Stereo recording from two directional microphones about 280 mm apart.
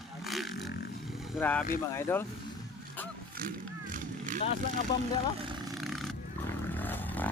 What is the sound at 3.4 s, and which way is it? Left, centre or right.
Vehicle, right.